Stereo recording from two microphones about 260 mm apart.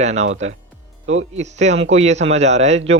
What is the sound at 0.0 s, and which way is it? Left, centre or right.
Speech, right.